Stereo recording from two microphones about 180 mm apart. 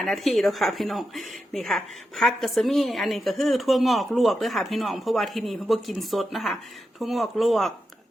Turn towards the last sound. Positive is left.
turn(degrees=0)  # may be behind; listen again after turning